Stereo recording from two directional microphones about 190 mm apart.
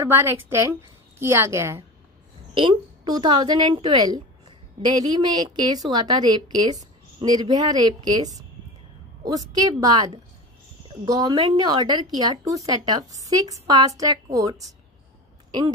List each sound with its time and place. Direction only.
0.1 s a woman's voice: 15° right (ahead or behind)
2.5 s a woman's voice: 25° right (ahead or behind)